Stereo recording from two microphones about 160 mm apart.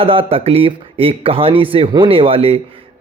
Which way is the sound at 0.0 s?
35° right (ahead or behind).